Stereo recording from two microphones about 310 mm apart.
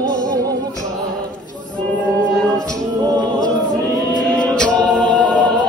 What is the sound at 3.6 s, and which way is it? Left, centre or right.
Chant, centre.